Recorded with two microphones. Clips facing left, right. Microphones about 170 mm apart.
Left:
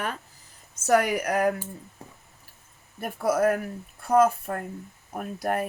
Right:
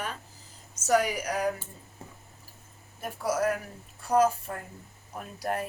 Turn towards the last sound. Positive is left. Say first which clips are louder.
# left 4 dB
turn(degrees=55)  # may be behind; listen again after turning